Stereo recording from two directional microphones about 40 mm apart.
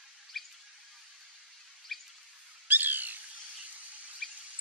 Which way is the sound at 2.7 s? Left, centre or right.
Right.